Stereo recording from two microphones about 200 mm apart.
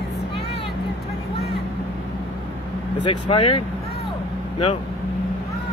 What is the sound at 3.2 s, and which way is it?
Speech, 25° left (ahead or behind).